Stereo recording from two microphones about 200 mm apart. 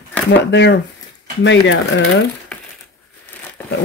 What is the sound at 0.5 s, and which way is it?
Speech, 60° left (ahead or behind).